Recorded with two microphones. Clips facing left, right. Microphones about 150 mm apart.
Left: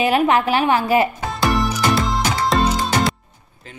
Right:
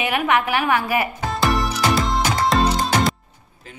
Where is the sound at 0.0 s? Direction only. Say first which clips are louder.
Left 4 dB; 30° left (ahead or behind).